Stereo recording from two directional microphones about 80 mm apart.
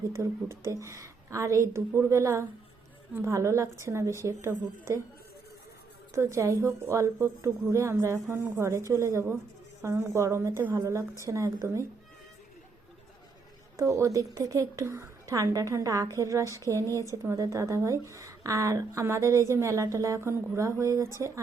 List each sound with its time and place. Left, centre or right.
0.1 s a woman's voice: right
6.1 s a woman's voice: right
13.7 s a woman's voice: right